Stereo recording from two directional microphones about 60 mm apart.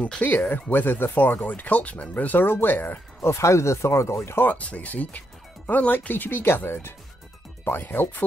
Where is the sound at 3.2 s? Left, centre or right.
Left.